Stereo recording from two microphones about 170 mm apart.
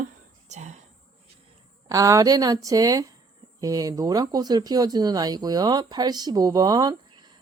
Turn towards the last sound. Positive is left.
turn(degrees=-25)  # may be behind; listen again after turning